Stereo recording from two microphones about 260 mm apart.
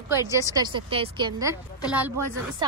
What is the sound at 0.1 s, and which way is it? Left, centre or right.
A woman's voice, centre.